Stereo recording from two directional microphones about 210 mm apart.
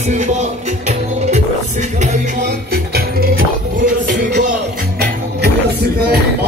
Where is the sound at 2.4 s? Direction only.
45° right (ahead or behind).